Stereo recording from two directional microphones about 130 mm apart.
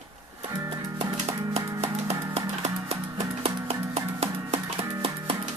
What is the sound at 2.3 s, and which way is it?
Music, 50° right (ahead or behind).